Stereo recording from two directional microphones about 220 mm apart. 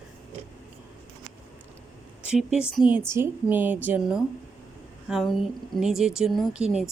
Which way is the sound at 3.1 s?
10° right (ahead or behind).